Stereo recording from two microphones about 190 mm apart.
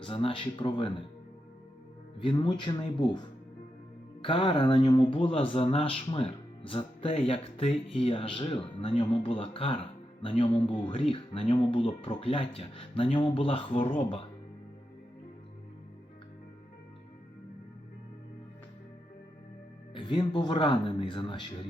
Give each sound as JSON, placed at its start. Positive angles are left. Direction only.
{"t": 0.0, "sound": "speech", "side_deg": 30}
{"t": 2.1, "sound": "speech", "side_deg": 25}
{"t": 19.9, "sound": "speech", "side_deg": 25}